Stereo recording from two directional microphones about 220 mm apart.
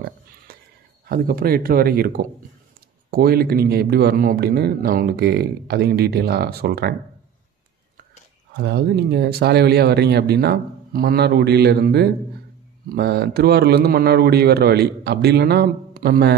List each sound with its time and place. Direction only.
1.0 s a man's voice: 40° right (ahead or behind)
8.5 s a man's voice: 50° right (ahead or behind)